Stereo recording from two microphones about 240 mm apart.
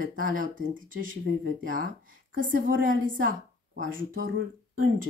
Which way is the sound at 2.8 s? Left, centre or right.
Right.